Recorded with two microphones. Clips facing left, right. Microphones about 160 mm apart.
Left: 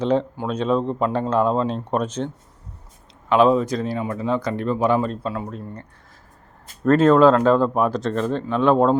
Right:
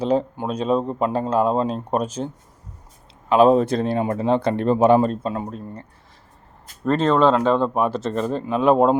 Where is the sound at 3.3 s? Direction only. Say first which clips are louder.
Right 2 dB; 45° right (ahead or behind).